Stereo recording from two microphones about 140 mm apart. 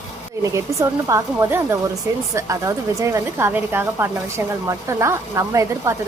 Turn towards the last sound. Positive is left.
turn(degrees=-20)  # may be behind; listen again after turning